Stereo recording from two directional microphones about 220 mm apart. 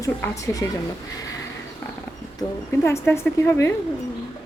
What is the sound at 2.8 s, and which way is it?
Speech, 10° left (ahead or behind).